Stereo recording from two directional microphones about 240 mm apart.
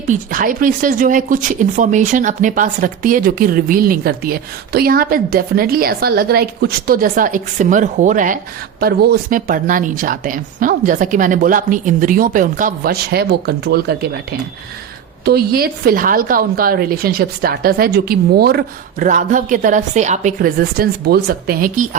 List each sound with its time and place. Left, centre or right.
0.1 s speech: right